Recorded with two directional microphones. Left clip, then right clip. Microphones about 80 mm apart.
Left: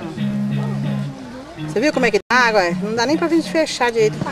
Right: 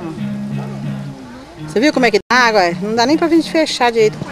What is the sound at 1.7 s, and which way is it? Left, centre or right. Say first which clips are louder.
Speech: right 4 dB; centre.